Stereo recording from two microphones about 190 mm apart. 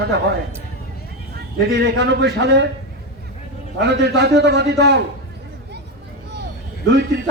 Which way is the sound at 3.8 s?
60° right (ahead or behind).